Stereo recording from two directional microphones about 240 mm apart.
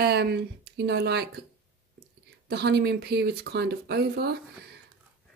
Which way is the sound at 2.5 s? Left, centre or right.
Right.